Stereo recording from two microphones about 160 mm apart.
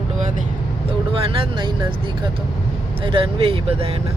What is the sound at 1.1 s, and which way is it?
Speech, 35° right (ahead or behind).